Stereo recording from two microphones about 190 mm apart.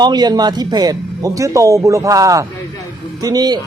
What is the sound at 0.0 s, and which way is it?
A man's voice, 20° right (ahead or behind).